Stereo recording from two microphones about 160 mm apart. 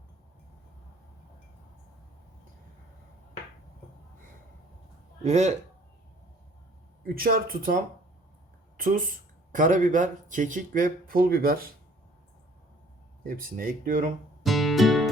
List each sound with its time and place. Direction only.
5.2 s a man's voice: 45° right (ahead or behind)
7.1 s speech: 65° right (ahead or behind)
8.8 s speech: 60° right (ahead or behind)
13.2 s speech: 60° right (ahead or behind)
14.4 s music: centre (ahead or behind)